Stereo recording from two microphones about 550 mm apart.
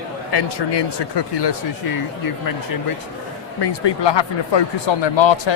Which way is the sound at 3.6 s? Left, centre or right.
Left.